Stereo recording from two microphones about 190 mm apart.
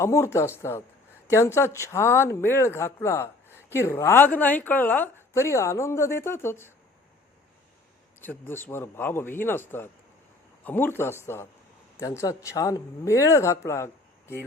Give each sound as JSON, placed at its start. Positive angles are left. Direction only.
{"t": 0.0, "sound": "speech", "side_deg": 15}
{"t": 8.2, "sound": "speech", "side_deg": 10}